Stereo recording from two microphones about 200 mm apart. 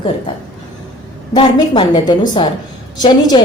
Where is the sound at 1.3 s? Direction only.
20° left (ahead or behind).